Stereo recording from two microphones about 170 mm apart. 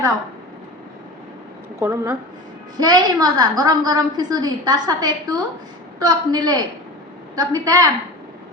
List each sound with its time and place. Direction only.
1.8 s a woman's voice: 15° right (ahead or behind)